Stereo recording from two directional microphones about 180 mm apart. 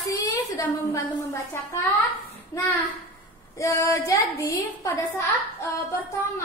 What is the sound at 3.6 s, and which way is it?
A woman's voice, 15° left (ahead or behind).